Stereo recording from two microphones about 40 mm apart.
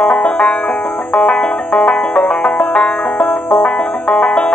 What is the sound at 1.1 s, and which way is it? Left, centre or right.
Banjo, left.